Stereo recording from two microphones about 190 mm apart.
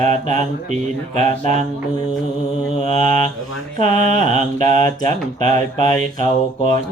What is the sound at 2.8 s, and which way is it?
Mantra, 40° right (ahead or behind).